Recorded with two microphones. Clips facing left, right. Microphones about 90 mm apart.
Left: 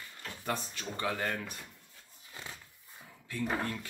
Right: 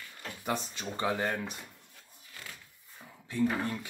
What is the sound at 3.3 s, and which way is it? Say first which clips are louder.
Speech: right 4 dB; 20° right (ahead or behind).